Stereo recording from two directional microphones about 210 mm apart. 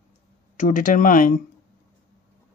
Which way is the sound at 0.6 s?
40° left (ahead or behind).